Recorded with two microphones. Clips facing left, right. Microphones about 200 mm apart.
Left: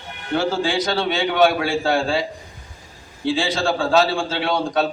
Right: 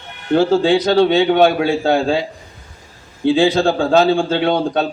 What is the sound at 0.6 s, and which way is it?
Speech, 60° right (ahead or behind).